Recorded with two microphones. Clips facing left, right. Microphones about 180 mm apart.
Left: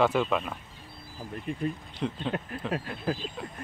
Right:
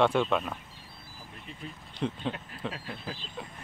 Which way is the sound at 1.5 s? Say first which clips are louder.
Left 14 dB; 50° left (ahead or behind).